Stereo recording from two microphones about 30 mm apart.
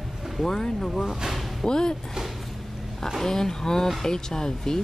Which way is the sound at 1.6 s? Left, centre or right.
Left.